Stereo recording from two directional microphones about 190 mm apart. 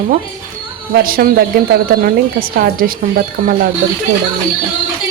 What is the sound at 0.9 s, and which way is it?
Speech, 55° right (ahead or behind).